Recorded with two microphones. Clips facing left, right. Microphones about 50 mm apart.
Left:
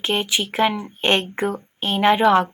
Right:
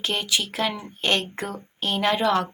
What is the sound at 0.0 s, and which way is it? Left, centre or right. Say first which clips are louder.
A woman's voice: left 4 dB; left.